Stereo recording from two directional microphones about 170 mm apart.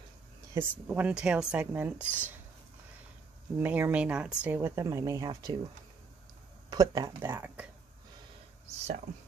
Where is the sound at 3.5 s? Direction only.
10° right (ahead or behind).